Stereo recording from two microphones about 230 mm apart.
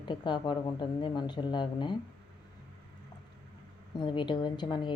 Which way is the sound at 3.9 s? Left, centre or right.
Centre.